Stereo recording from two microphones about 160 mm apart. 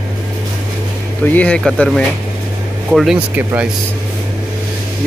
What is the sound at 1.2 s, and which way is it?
Speech, 10° left (ahead or behind).